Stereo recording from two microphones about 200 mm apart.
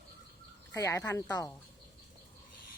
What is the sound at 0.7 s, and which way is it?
Speech, 15° left (ahead or behind).